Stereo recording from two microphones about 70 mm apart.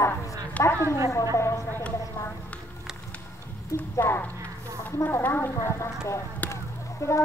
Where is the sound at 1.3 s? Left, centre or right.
Left.